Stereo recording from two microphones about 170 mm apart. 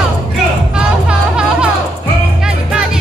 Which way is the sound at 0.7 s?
5° right (ahead or behind).